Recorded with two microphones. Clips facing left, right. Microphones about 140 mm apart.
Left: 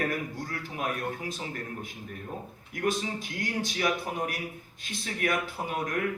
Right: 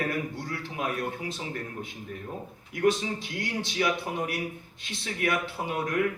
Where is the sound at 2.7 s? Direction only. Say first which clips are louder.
Right 4 dB; 45° left (ahead or behind).